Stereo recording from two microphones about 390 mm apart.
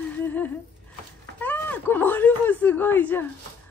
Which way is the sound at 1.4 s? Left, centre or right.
Centre.